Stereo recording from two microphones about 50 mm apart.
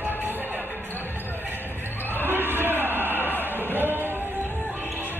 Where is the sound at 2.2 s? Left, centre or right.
Right.